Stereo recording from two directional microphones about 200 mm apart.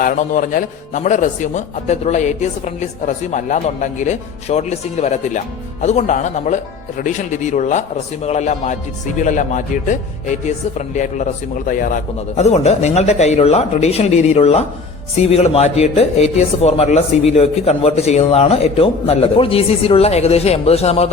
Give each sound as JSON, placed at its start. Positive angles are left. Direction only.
{"t": 0.0, "sound": "a man's voice", "side_deg": 40}